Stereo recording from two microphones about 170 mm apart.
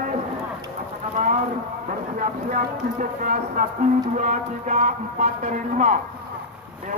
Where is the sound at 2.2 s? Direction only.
50° right (ahead or behind).